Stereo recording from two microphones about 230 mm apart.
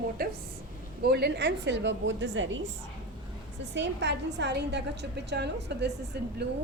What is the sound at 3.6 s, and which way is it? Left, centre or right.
A woman's voice, right.